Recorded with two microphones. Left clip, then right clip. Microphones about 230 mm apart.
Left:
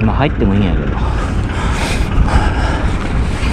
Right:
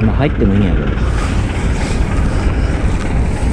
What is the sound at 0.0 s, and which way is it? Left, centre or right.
Speech, centre.